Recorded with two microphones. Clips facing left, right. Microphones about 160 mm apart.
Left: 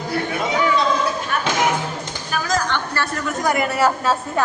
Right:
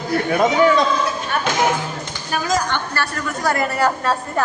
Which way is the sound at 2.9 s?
20° left (ahead or behind).